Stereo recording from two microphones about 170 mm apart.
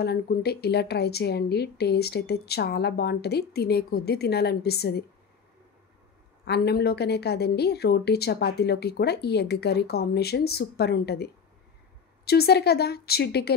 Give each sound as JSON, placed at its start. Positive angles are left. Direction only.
{"t": 0.0, "sound": "speech", "side_deg": 70}
{"t": 6.4, "sound": "speech", "side_deg": 75}
{"t": 12.3, "sound": "speech", "side_deg": 70}